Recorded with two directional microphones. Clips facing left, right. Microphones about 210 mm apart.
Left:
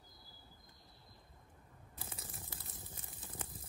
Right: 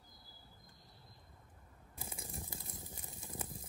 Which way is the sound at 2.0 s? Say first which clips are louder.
Right 4 dB; 15° right (ahead or behind).